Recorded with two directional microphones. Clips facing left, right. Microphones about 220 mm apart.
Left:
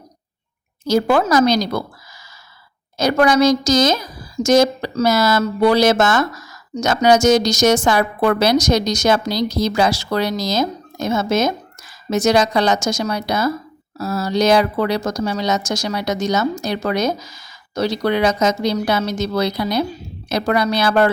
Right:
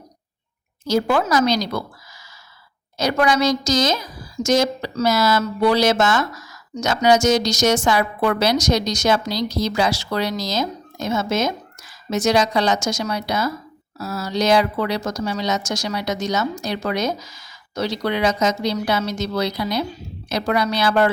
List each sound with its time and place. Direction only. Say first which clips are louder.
0.9 s a woman's voice: left 3 dB; 45° left (ahead or behind)
3.0 s a woman's voice: left 4 dB; 45° left (ahead or behind)